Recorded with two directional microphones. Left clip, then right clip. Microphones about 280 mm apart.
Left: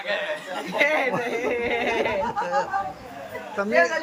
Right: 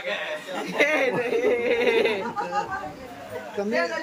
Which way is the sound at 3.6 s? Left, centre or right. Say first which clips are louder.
Left 5 dB; centre.